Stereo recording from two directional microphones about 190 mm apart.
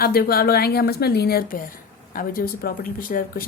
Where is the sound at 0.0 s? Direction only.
55° left (ahead or behind).